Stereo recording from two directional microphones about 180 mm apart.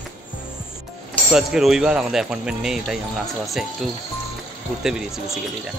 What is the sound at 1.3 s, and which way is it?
Speech, 5° right (ahead or behind).